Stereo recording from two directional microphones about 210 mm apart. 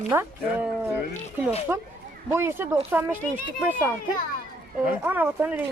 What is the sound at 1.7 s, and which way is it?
Speech, 10° right (ahead or behind).